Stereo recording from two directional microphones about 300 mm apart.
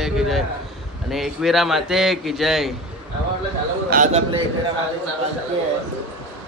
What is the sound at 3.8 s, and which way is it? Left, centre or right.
Speech, right.